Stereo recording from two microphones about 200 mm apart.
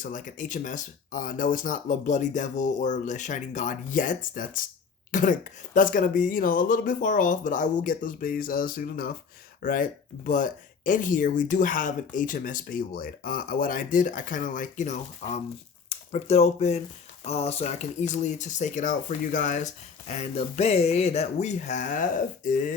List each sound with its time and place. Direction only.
0.0 s speech: 40° left (ahead or behind)